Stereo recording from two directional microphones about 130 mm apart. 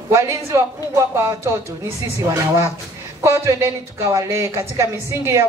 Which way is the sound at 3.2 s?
20° right (ahead or behind).